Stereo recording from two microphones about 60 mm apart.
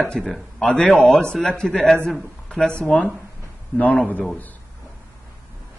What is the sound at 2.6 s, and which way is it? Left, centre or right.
A man's voice, centre.